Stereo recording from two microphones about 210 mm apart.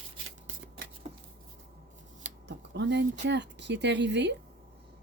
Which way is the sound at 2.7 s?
55° right (ahead or behind).